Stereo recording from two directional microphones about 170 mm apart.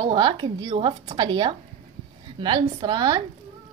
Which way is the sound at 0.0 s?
30° right (ahead or behind).